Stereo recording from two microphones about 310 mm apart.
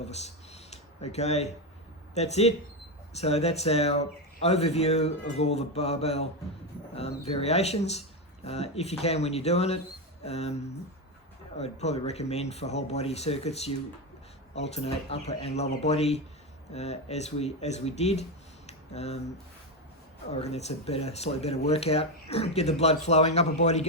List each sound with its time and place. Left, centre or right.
0.0 s a sound: left
2.1 s speech: left
20.3 s speech: left